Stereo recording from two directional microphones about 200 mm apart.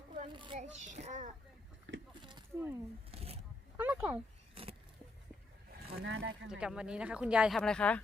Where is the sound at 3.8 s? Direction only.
10° right (ahead or behind).